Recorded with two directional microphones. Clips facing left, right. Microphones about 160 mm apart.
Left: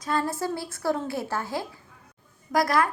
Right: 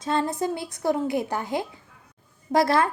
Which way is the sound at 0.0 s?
25° right (ahead or behind).